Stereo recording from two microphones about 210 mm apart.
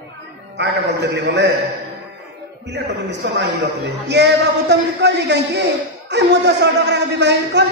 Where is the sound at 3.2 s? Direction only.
55° right (ahead or behind).